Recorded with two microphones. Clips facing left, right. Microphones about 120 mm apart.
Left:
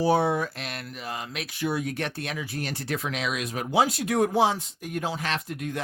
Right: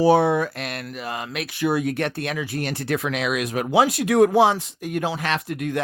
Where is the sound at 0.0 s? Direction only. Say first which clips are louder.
Right 6 dB; 75° right (ahead or behind).